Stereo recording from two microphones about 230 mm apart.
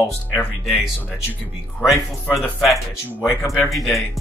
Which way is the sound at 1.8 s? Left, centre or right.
Centre.